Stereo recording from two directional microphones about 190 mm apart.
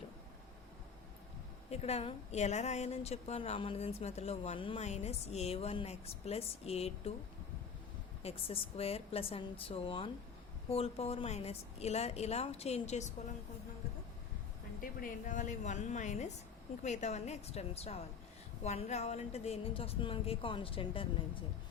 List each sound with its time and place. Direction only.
1.7 s a woman's voice: 35° left (ahead or behind)
8.2 s a woman's voice: 35° left (ahead or behind)
14.8 s a woman's voice: 45° left (ahead or behind); by 21.1 s 30° left (ahead or behind)